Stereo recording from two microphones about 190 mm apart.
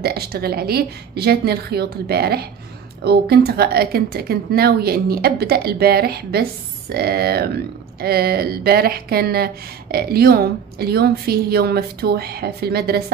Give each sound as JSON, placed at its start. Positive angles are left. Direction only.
{"t": 0.0, "sound": "speech", "side_deg": -55}